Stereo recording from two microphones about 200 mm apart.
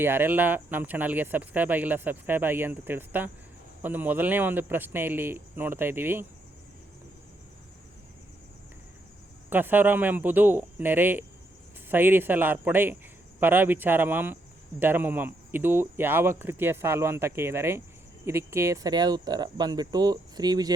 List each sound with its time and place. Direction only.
0.0 s speech: 10° right (ahead or behind)
9.5 s speech: 10° right (ahead or behind)